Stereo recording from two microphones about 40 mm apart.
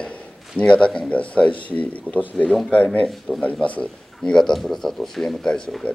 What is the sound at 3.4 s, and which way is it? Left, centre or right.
Speech, left.